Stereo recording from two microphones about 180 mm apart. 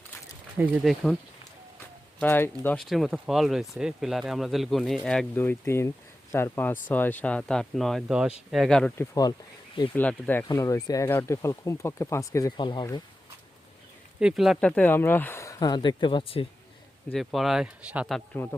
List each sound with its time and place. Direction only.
0.5 s speech: 10° right (ahead or behind)
2.2 s speech: 10° left (ahead or behind)
2.9 s speech: centre (ahead or behind)
9.0 s speech: 20° left (ahead or behind)
9.9 s speech: 10° left (ahead or behind)
14.2 s speech: 5° right (ahead or behind); by 16.5 s 30° left (ahead or behind)
17.1 s speech: centre (ahead or behind)
18.4 s speech: 15° left (ahead or behind)